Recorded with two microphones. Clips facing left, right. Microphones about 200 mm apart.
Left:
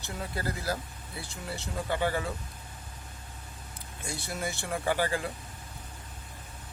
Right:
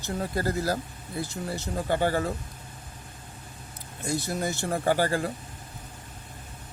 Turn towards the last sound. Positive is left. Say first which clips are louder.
# right 4 dB
turn(degrees=-40)  # may be behind; listen again after turning